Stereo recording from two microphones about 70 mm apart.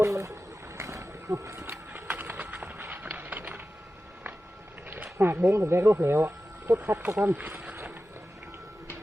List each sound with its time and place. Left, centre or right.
0.0 s a sound: right
0.8 s wild animals: right
1.6 s clip-clop: right
2.4 s run: right
5.1 s speech: right
7.3 s vehicle: right